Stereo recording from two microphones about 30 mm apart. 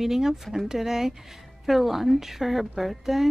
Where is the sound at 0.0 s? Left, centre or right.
Centre.